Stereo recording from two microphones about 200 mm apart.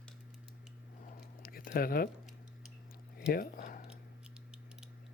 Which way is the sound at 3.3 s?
50° left (ahead or behind).